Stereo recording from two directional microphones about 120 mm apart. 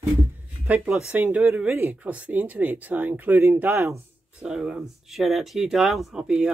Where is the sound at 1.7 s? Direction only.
20° right (ahead or behind).